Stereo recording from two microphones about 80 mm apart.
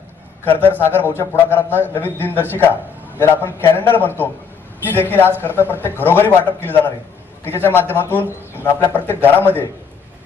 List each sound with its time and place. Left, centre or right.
0.4 s a man's voice: left